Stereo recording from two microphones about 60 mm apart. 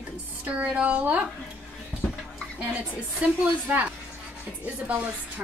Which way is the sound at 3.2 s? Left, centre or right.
Right.